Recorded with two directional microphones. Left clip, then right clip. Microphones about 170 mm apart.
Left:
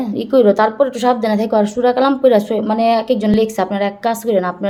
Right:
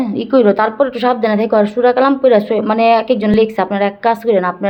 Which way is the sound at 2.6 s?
5° right (ahead or behind).